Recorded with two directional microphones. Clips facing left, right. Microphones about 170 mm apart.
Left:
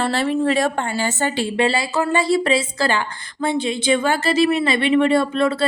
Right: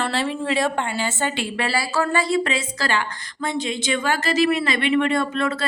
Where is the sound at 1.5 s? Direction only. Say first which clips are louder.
Left 4 dB; 25° left (ahead or behind).